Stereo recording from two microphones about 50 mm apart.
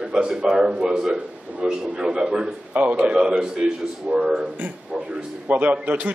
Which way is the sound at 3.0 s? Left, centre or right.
Centre.